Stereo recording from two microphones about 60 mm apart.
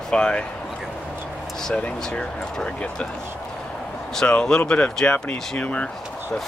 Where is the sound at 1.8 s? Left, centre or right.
Left.